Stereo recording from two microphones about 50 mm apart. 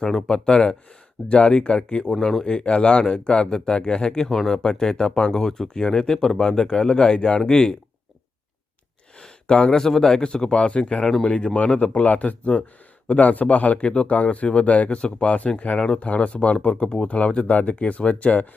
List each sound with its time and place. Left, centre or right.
0.0 s speech: centre
0.3 s speech: centre
2.1 s speech: centre
2.4 s speech: centre
4.3 s speech: centre
4.5 s speech: centre
9.1 s speech: centre